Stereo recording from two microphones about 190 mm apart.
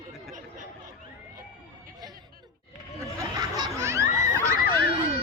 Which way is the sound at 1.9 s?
20° right (ahead or behind).